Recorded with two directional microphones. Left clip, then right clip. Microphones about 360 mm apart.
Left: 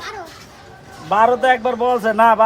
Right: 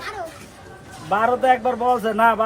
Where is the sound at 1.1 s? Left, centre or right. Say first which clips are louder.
Left 4 dB; centre.